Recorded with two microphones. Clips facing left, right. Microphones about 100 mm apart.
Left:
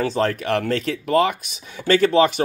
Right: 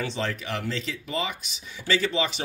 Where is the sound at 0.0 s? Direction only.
50° left (ahead or behind).